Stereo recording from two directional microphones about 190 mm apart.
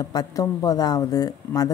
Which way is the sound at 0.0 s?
20° left (ahead or behind).